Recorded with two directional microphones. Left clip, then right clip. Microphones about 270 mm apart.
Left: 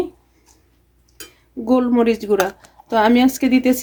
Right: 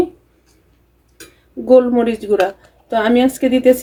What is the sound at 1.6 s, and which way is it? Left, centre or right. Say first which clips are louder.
A woman's voice: right 5 dB; left.